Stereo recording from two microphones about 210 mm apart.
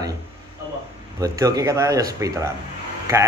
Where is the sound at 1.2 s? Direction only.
15° right (ahead or behind).